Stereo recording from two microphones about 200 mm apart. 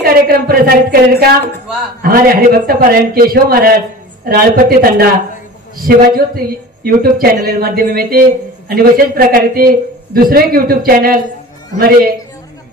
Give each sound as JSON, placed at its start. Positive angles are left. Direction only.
{"t": 0.0, "sound": "speech", "side_deg": -50}